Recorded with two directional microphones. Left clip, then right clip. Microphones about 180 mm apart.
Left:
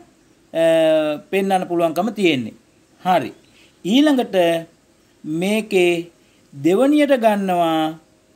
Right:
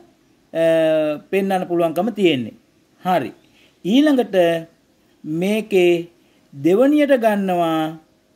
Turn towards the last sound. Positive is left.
turn(degrees=-35)  # may be behind; listen again after turning